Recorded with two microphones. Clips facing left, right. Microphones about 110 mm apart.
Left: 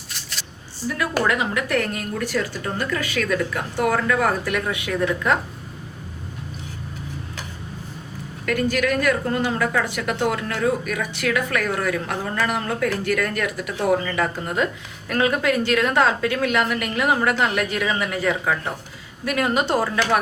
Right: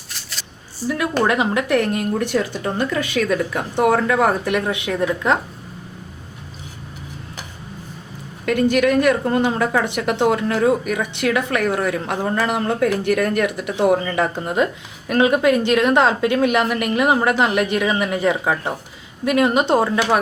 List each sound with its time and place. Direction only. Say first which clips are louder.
0.1 s a sound: right 1 dB; centre (ahead or behind)
1.2 s a woman's voice: right 5 dB; 25° right (ahead or behind)
8.4 s a woman's voice: right 5 dB; 25° right (ahead or behind)